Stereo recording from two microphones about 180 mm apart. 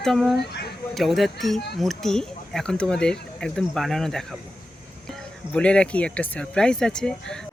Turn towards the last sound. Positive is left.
turn(degrees=5)  # may be behind; listen again after turning